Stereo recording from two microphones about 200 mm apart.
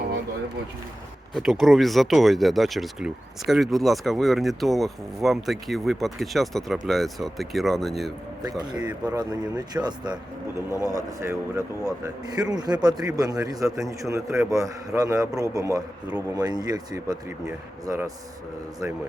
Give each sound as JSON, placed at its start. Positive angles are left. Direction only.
{"t": 1.3, "sound": "speech", "side_deg": 0}
{"t": 8.4, "sound": "speech", "side_deg": -20}
{"t": 10.5, "sound": "speech", "side_deg": 15}
{"t": 10.8, "sound": "a man's voice", "side_deg": -15}